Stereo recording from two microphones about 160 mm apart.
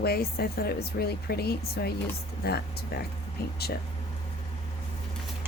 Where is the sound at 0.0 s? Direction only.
75° left (ahead or behind).